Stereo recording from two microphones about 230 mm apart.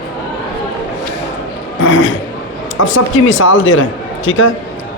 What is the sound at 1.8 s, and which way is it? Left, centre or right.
A man's voice, left.